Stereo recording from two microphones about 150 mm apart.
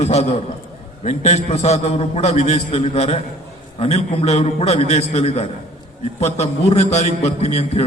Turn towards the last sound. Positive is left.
turn(degrees=45)  # may be behind; listen again after turning